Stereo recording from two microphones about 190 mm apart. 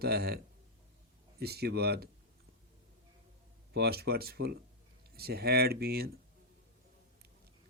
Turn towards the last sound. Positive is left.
turn(degrees=-55)  # may be behind; listen again after turning